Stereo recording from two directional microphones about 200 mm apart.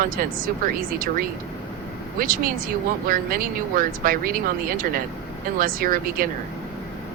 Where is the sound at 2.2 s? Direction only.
45° right (ahead or behind).